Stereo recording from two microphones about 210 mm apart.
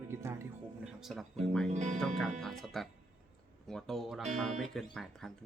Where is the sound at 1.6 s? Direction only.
35° right (ahead or behind).